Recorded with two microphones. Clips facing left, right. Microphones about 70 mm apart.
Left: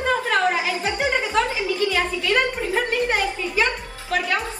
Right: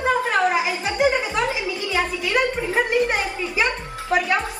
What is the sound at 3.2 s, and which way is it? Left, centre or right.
Music, right.